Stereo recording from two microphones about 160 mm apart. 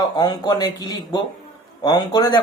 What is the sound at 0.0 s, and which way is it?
Speech, 25° left (ahead or behind).